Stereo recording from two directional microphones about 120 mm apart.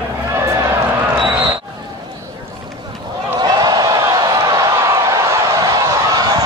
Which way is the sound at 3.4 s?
35° right (ahead or behind).